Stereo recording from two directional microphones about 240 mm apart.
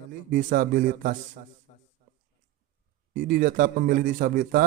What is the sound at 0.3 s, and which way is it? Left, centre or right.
Speech, right.